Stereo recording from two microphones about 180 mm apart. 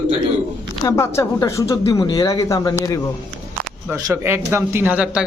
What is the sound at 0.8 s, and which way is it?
Speech, 15° left (ahead or behind).